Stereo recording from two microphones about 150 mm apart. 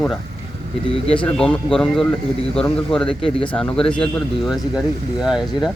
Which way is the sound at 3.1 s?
35° left (ahead or behind).